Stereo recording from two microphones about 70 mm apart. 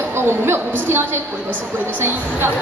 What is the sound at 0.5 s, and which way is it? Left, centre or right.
Speech, right.